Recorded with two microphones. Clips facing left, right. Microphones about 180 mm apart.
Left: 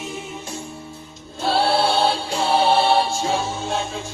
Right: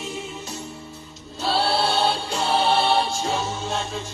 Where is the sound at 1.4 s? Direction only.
50° left (ahead or behind).